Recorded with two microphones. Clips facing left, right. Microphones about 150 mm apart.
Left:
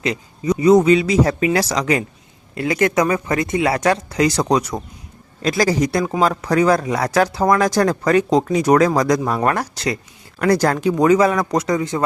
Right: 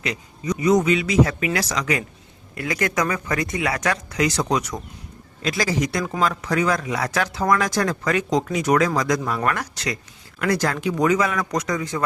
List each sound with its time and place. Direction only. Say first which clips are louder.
0.0 s speech: left 6 dB; 30° left (ahead or behind)